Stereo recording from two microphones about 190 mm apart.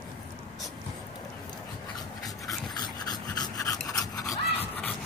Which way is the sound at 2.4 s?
20° left (ahead or behind).